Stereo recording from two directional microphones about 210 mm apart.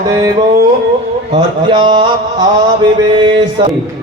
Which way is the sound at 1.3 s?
25° right (ahead or behind).